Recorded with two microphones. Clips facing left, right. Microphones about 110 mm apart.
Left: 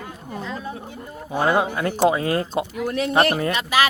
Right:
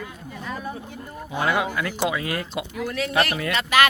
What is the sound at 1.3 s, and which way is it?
Speech, 35° left (ahead or behind).